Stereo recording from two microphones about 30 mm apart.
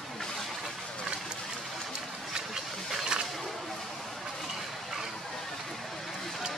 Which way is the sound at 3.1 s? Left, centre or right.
Right.